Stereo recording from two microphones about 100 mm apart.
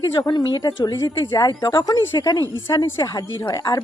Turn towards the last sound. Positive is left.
turn(degrees=45)  # may be behind; listen again after turning